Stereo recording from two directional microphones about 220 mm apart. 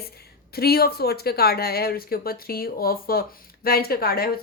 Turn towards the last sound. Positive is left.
turn(degrees=45)  # may be behind; listen again after turning